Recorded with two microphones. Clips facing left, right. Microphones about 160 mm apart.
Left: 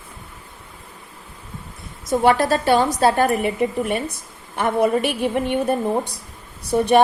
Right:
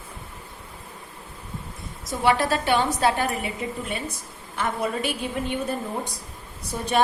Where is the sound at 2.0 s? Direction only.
45° left (ahead or behind).